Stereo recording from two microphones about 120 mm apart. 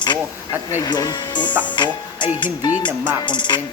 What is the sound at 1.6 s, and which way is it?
Music, 40° left (ahead or behind).